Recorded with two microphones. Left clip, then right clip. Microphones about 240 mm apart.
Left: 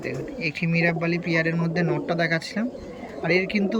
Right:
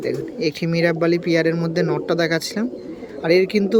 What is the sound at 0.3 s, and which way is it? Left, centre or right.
Speech, centre.